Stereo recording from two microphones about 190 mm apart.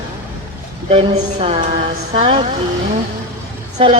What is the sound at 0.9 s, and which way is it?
Speech, 30° right (ahead or behind).